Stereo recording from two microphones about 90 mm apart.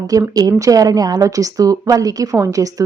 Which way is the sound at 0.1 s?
40° right (ahead or behind).